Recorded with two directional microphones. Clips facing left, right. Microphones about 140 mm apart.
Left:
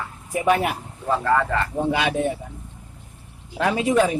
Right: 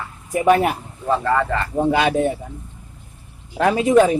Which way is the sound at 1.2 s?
5° left (ahead or behind).